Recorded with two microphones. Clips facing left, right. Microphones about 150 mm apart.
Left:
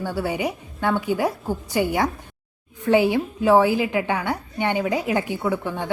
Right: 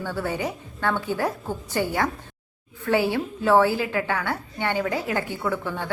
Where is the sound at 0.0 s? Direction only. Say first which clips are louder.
Left 3 dB; 10° left (ahead or behind).